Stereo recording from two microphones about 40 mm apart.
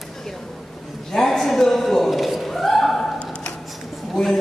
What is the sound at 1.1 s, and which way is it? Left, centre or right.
A man's voice, centre.